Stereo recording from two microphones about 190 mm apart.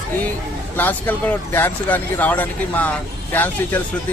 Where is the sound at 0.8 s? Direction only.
10° left (ahead or behind).